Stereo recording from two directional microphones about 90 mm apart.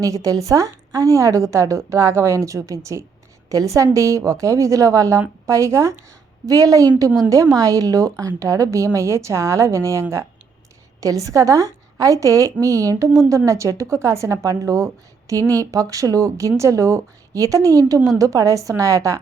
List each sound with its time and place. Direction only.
0.0 s a woman's voice: 40° right (ahead or behind)